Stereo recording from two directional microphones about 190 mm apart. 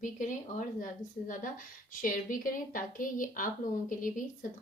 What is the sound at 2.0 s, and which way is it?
Speech, 45° left (ahead or behind).